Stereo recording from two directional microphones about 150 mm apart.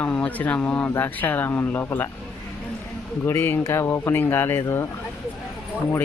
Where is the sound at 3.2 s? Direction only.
15° left (ahead or behind).